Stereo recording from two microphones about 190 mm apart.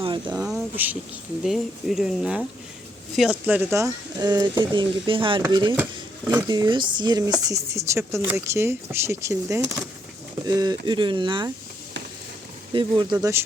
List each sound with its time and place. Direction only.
0.0 s speech: 25° right (ahead or behind)
0.4 s speech: 5° right (ahead or behind); by 5.7 s 25° right (ahead or behind)
5.7 s a sound: 10° right (ahead or behind)
6.5 s speech: 25° right (ahead or behind)
12.7 s speech: 25° right (ahead or behind)